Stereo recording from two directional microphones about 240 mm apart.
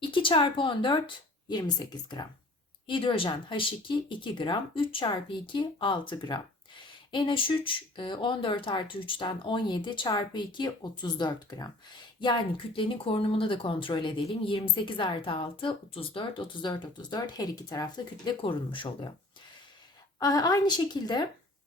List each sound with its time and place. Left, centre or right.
0.1 s a woman's voice: left
12.7 s a woman's voice: left
20.1 s a woman's voice: centre